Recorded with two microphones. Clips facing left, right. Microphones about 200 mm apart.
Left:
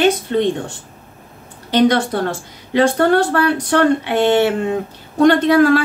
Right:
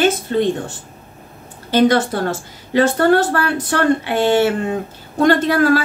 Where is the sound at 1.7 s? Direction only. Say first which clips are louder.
Even; 5° right (ahead or behind).